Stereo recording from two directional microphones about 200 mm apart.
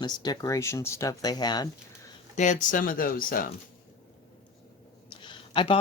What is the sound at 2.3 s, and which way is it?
Speech, 35° left (ahead or behind).